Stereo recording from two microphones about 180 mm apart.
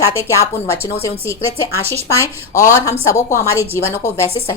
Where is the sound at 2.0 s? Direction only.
15° left (ahead or behind).